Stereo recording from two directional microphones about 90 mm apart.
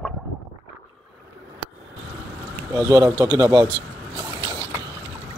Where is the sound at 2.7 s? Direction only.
35° right (ahead or behind).